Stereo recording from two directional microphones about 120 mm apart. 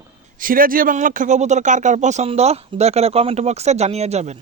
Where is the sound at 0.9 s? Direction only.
90° right; by 4.4 s 65° right (ahead or behind).